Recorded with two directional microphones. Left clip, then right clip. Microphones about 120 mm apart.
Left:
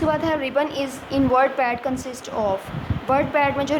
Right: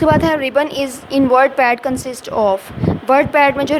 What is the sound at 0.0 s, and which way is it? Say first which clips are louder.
A woman's voice: right 8 dB; 55° right (ahead or behind).